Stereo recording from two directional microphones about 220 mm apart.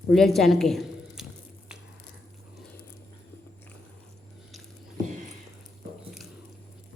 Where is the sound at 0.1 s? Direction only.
Centre (ahead or behind).